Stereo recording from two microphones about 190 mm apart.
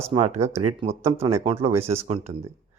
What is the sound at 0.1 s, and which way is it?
Speech, 35° right (ahead or behind).